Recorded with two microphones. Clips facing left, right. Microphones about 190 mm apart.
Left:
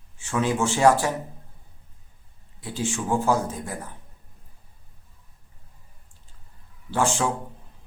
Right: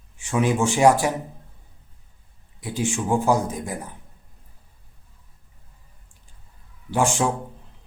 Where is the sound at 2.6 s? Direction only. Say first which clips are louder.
Right 3 dB; 15° right (ahead or behind).